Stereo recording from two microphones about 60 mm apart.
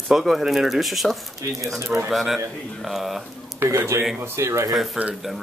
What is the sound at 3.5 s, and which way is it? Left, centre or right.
A man's voice, right.